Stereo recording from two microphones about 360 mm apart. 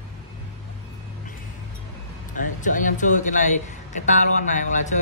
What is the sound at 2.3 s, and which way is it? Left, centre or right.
A man's voice, left.